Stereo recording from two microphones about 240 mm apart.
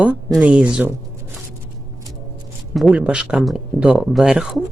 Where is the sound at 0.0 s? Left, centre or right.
Centre.